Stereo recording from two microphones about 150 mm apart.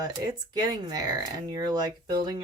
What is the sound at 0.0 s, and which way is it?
A woman's voice, 25° right (ahead or behind).